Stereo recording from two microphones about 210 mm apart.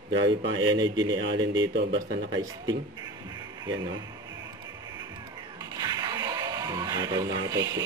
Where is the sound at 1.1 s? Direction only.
60° right (ahead or behind).